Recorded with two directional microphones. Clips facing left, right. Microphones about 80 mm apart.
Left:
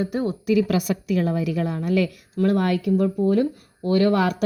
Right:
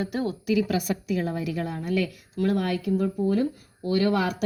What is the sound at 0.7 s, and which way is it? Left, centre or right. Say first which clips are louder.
A woman's voice: left 4 dB; left.